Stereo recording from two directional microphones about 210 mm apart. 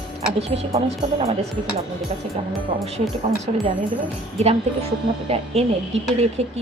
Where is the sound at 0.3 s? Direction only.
30° right (ahead or behind).